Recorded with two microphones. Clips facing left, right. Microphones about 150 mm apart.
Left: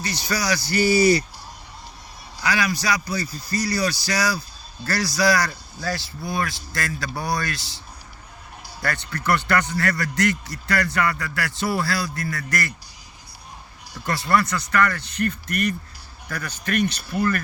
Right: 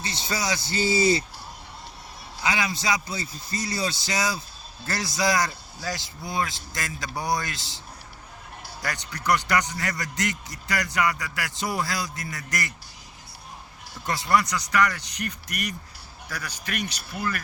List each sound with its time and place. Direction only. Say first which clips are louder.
0.0 s a man's voice: left 3 dB; 25° right (ahead or behind)
2.4 s a man's voice: left 3 dB; 20° right (ahead or behind)
8.8 s a man's voice: left 5 dB; 15° right (ahead or behind)
14.1 s speech: left 2 dB; 15° right (ahead or behind)